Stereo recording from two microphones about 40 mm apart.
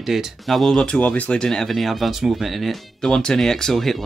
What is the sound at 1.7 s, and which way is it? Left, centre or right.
Speech, centre.